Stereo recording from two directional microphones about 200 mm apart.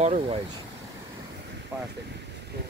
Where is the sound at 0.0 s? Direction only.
35° right (ahead or behind).